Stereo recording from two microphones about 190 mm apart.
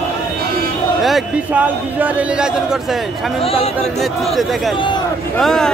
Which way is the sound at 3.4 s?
30° left (ahead or behind).